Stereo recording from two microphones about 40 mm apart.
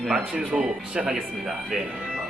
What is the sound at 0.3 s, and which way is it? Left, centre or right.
Speech, right.